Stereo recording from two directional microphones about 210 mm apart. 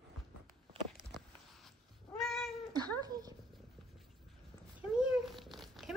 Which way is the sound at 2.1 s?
Centre (ahead or behind).